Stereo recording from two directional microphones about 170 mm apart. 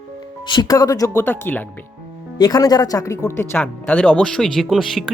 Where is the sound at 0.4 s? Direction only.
25° left (ahead or behind); by 1.6 s 10° left (ahead or behind).